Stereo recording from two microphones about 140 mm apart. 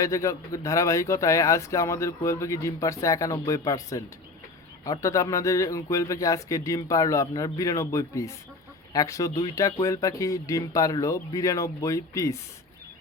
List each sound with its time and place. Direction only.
0.0 s speech: 20° left (ahead or behind)